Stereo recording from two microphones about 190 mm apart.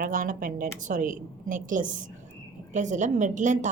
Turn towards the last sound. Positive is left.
turn(degrees=-40)  # may be behind; listen again after turning